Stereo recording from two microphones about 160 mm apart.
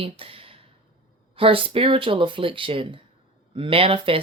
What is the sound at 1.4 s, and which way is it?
Speech, 35° right (ahead or behind).